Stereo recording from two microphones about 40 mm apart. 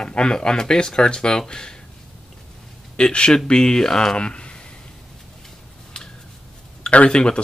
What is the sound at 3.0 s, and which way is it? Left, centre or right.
Speech, left.